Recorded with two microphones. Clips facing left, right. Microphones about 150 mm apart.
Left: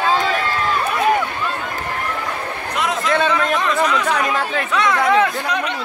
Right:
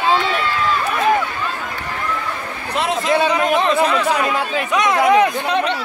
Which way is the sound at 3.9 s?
10° right (ahead or behind).